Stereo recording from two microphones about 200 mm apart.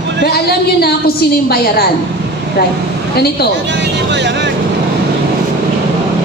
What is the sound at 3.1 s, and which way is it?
Speech, 55° left (ahead or behind).